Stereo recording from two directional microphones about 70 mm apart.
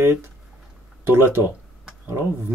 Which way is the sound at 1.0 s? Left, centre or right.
Right.